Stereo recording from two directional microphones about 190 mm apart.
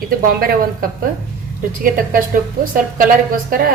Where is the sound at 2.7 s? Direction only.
45° right (ahead or behind).